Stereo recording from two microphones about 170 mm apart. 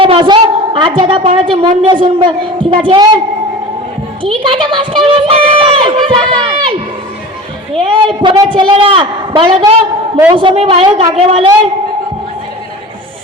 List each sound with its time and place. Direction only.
0.0 s a woman's voice: 30° right (ahead or behind)
4.4 s speech: 30° right (ahead or behind)